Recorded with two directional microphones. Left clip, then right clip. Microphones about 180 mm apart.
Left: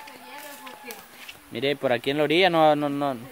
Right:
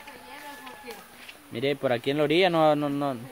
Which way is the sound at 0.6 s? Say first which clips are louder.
Left 1 dB; 55° left (ahead or behind).